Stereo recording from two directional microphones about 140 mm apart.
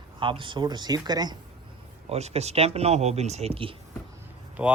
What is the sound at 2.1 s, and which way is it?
Speech, 50° right (ahead or behind).